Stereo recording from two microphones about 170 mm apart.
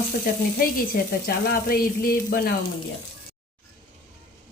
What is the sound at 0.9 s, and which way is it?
A woman's voice, 65° left (ahead or behind).